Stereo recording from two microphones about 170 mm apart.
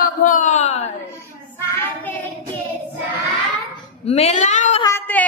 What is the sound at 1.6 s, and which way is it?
Child singing, 15° left (ahead or behind).